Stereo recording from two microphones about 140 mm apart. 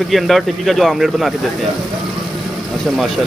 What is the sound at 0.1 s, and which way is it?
Speech, centre (ahead or behind).